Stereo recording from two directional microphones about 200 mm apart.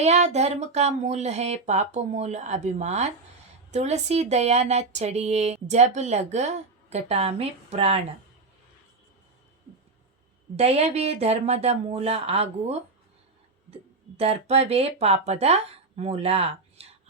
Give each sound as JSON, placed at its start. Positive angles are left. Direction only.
{"t": 0.0, "sound": "speech", "side_deg": -35}
{"t": 10.6, "sound": "speech", "side_deg": -30}
{"t": 14.2, "sound": "speech", "side_deg": -30}